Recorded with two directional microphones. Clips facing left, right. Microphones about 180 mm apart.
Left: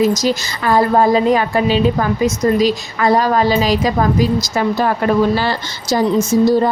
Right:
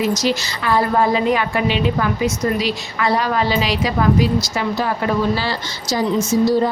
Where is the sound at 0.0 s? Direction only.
45° left (ahead or behind).